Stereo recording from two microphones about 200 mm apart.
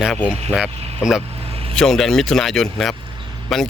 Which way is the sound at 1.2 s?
30° right (ahead or behind).